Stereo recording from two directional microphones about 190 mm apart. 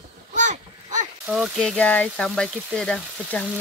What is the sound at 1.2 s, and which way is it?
Speech, centre (ahead or behind).